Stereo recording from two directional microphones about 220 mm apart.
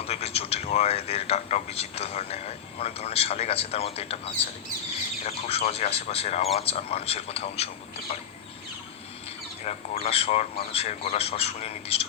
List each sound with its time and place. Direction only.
0.0 s speech: 25° left (ahead or behind)
5.2 s a man's voice: 30° left (ahead or behind)
9.6 s a man's voice: 25° left (ahead or behind)